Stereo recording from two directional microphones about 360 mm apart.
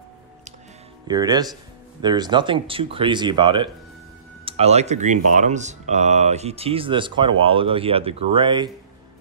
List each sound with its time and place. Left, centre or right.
1.0 s speech: centre